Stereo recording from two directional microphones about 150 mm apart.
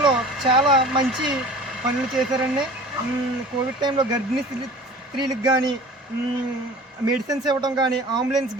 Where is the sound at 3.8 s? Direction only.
30° right (ahead or behind).